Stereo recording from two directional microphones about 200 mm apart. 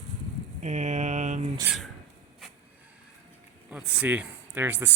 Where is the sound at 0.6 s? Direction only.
35° right (ahead or behind).